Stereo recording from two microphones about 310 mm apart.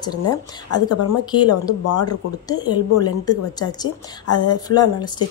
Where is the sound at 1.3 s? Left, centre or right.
Centre.